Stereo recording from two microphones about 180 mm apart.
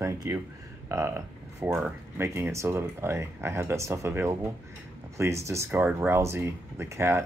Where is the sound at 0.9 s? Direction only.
15° right (ahead or behind).